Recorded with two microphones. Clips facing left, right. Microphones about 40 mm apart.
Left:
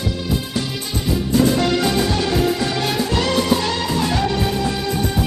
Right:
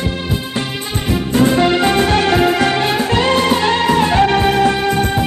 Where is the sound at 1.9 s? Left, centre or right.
Right.